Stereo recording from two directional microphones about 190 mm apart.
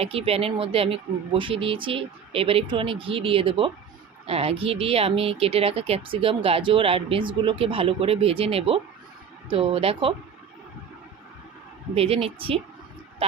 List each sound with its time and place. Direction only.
0.0 s speech: 30° right (ahead or behind)
11.9 s speech: 30° right (ahead or behind)